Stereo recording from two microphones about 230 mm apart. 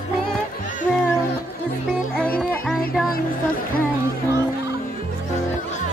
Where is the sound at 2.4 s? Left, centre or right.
Centre.